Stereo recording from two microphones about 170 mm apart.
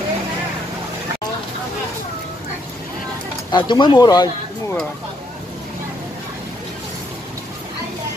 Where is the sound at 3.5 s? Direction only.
25° left (ahead or behind).